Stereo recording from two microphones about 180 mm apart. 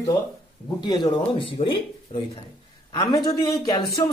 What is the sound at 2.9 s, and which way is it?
Speech, 20° left (ahead or behind).